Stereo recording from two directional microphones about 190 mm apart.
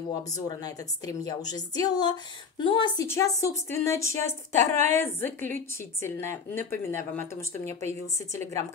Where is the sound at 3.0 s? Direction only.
15° left (ahead or behind).